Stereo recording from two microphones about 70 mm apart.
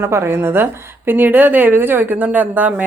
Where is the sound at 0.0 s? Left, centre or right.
Right.